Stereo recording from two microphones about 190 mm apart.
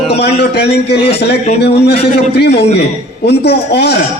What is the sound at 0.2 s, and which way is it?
A man's voice, 60° left (ahead or behind).